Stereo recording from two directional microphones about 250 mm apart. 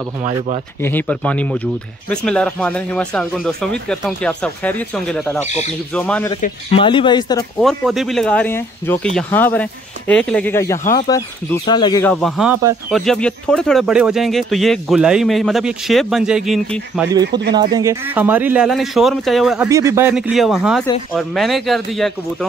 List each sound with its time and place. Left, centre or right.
0.8 s speech: centre
6.4 s speech: left
7.5 s speech: centre
17.2 s speech: right
17.6 s speech: centre
19.7 s speech: centre